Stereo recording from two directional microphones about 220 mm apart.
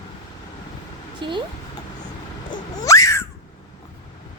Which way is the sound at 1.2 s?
20° right (ahead or behind).